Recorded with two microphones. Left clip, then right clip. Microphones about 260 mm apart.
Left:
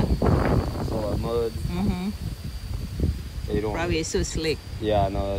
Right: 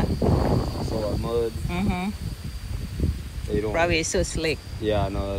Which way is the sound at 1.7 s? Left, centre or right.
Centre.